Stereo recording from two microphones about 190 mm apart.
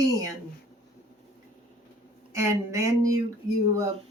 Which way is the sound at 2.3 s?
15° right (ahead or behind).